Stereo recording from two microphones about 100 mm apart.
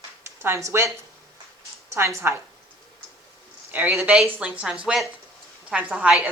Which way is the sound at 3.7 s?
20° right (ahead or behind).